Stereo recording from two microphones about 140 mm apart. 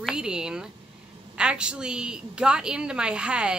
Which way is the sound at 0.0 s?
5° right (ahead or behind).